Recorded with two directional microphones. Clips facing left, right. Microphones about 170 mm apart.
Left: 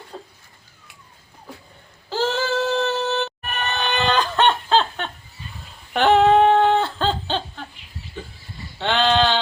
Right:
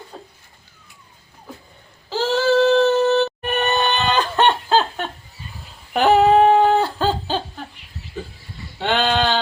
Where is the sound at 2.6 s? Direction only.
Centre (ahead or behind).